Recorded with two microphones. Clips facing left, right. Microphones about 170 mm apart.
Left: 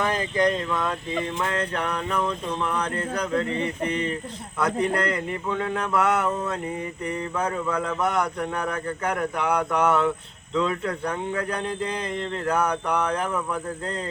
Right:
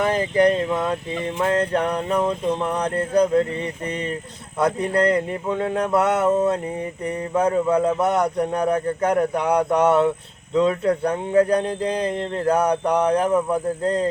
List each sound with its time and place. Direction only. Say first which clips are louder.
0.3 s speech: right 6 dB; 30° right (ahead or behind)
4.5 s speech: right 4 dB; 30° right (ahead or behind)